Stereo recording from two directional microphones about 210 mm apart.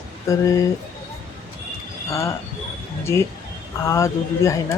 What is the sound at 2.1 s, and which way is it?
Speech, 15° left (ahead or behind).